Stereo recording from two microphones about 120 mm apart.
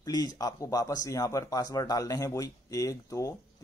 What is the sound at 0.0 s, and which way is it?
A man's voice, 30° left (ahead or behind).